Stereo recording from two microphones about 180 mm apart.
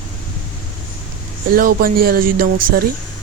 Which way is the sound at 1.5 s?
55° right (ahead or behind).